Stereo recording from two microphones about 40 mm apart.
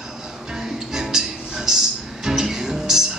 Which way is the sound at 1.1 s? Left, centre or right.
Centre.